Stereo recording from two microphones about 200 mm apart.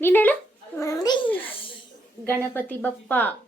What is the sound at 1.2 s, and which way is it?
Speech, 10° left (ahead or behind).